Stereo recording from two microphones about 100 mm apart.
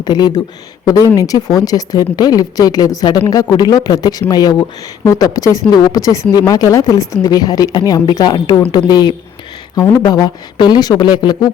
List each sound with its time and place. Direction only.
0.0 s speech: 45° left (ahead or behind)